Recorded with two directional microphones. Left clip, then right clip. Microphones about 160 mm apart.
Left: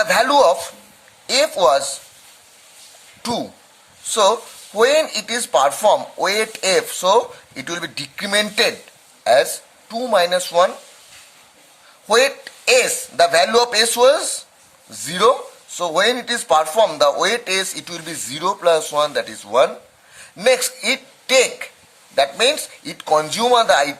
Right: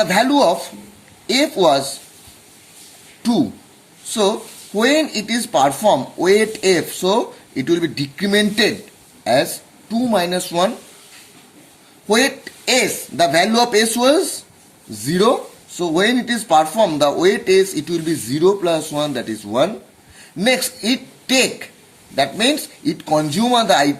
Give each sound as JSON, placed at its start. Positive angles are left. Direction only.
{"t": 0.2, "sound": "speech", "side_deg": 45}
{"t": 4.0, "sound": "speech", "side_deg": 45}
{"t": 4.5, "sound": "a sound", "side_deg": 0}
{"t": 5.1, "sound": "a man's voice", "side_deg": 40}
{"t": 12.0, "sound": "a man's voice", "side_deg": 40}